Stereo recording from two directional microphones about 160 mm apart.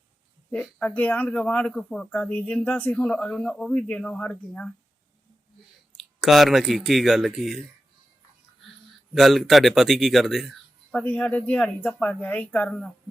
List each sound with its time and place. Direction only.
0.5 s speech: 5° left (ahead or behind)
6.1 s speech: centre (ahead or behind)
9.1 s speech: centre (ahead or behind)